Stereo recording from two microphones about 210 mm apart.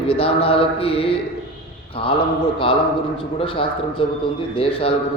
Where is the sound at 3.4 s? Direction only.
25° left (ahead or behind).